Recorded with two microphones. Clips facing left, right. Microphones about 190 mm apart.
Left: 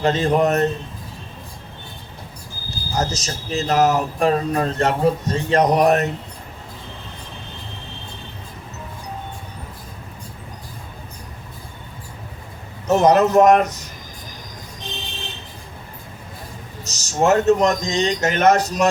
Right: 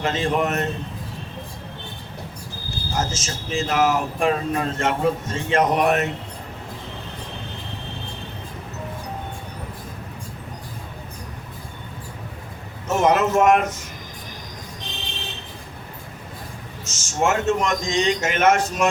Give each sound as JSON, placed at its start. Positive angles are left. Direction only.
{"t": 0.0, "sound": "speech", "side_deg": 40}
{"t": 2.6, "sound": "speech", "side_deg": 40}
{"t": 12.9, "sound": "speech", "side_deg": 35}
{"t": 16.8, "sound": "speech", "side_deg": 35}